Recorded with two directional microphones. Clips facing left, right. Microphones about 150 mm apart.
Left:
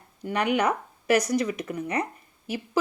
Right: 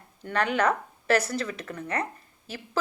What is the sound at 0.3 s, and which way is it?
Speech, 15° left (ahead or behind).